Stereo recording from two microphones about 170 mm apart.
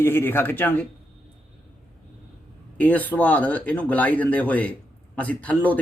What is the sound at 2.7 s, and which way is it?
Speech, 10° left (ahead or behind).